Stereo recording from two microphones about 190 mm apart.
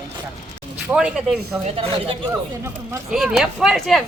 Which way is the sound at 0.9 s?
5° right (ahead or behind).